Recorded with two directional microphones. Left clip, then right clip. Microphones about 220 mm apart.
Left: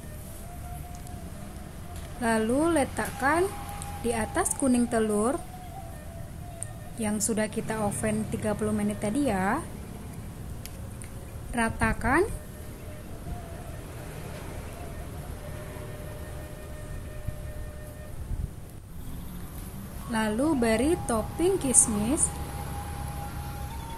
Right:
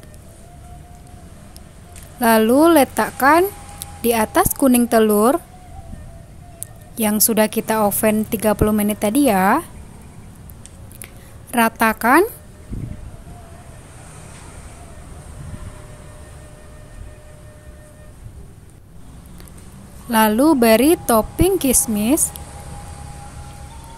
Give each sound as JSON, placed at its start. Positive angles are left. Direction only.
{"t": 2.1, "sound": "a woman's voice", "side_deg": -50}
{"t": 7.0, "sound": "a woman's voice", "side_deg": -45}
{"t": 11.5, "sound": "a woman's voice", "side_deg": -50}
{"t": 20.1, "sound": "a woman's voice", "side_deg": -50}